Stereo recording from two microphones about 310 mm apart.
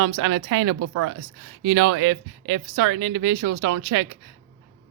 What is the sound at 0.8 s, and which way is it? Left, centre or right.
Speech, right.